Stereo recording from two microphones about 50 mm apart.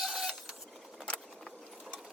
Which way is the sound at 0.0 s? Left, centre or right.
Centre.